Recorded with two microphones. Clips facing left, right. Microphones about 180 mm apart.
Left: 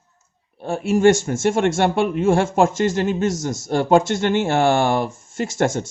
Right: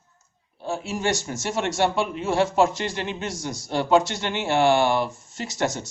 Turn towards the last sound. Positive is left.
turn(degrees=50)  # may be behind; listen again after turning